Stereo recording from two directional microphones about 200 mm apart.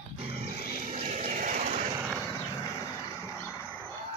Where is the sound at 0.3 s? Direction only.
30° right (ahead or behind).